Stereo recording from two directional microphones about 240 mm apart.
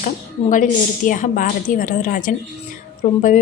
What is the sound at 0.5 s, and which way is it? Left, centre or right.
A woman's voice, left.